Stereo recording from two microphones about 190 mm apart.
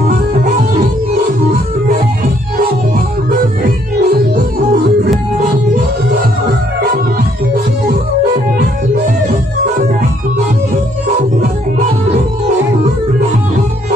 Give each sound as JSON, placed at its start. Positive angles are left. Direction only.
{"t": 3.3, "sound": "music", "side_deg": -50}